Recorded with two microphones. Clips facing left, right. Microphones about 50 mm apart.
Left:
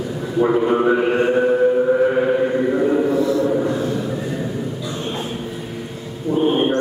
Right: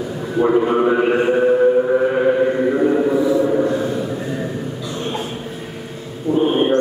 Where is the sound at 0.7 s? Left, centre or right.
Centre.